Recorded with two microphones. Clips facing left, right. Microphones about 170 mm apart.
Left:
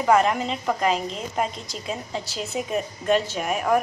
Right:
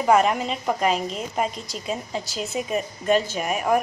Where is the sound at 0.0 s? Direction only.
15° right (ahead or behind).